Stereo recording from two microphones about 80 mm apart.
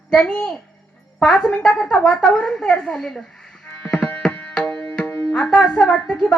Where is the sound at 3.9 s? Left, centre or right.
Centre.